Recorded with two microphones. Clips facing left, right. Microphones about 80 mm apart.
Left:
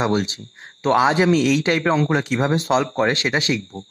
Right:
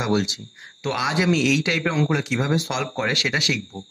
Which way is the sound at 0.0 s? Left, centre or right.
Left.